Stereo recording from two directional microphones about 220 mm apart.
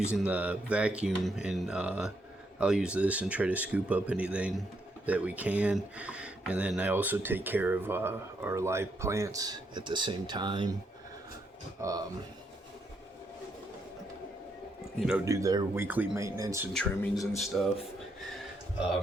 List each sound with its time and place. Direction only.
0.1 s speech: 5° right (ahead or behind)
11.8 s speech: 15° right (ahead or behind)
15.2 s speech: 15° right (ahead or behind)
16.7 s speech: 5° left (ahead or behind)